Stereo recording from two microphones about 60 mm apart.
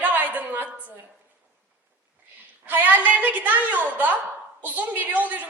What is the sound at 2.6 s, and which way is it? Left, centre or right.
A woman's voice, right.